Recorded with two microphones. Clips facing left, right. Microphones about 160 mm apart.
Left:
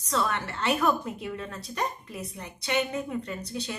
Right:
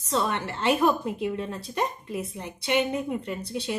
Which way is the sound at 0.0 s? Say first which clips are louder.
Right 2 dB; 25° right (ahead or behind).